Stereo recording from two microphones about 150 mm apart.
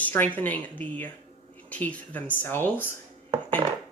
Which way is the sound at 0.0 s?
10° left (ahead or behind).